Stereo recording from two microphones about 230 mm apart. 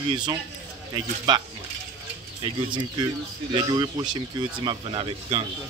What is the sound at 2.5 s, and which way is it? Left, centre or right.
Speech, right.